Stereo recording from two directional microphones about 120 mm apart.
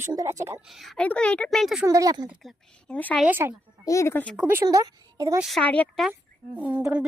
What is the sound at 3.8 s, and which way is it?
Speech, 25° left (ahead or behind).